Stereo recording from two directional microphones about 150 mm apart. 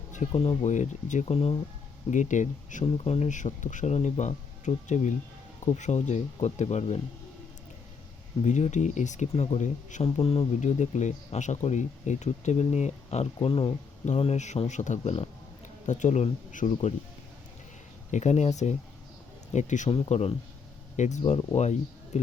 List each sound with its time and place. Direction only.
0.3 s speech: 40° left (ahead or behind)
2.0 s speech: 55° left (ahead or behind)
2.8 s speech: 45° left (ahead or behind)
8.4 s speech: 55° left (ahead or behind)
18.1 s speech: 50° left (ahead or behind)
19.9 s speech: 45° left (ahead or behind)